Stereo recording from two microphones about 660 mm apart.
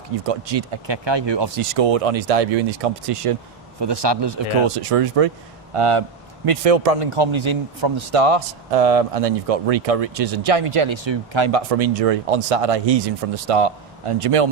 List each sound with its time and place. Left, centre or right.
0.3 s a man's voice: right
0.9 s speech: right
1.8 s a man's voice: right
3.8 s a man's voice: right